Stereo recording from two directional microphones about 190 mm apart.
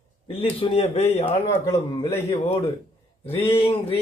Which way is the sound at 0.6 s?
30° left (ahead or behind).